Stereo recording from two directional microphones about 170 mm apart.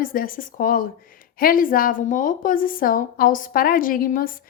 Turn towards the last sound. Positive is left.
turn(degrees=55)  # may be behind; listen again after turning